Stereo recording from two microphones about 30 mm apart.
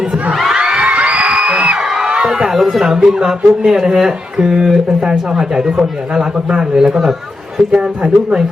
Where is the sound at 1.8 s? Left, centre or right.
Centre.